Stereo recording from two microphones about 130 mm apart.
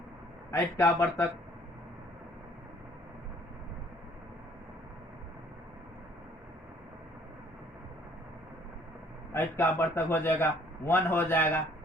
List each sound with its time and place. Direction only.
0.5 s speech: 20° left (ahead or behind)
9.3 s a man's voice: 15° left (ahead or behind)